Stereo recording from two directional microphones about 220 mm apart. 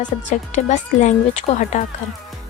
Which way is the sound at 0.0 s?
35° left (ahead or behind).